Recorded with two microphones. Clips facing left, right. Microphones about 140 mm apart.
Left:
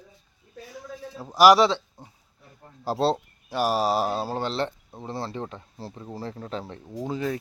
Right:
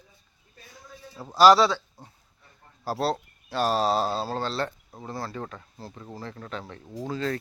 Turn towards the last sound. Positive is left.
turn(degrees=15)  # may be behind; listen again after turning